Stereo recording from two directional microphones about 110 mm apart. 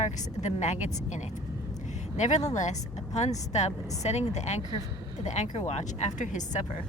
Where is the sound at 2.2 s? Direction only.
90° left.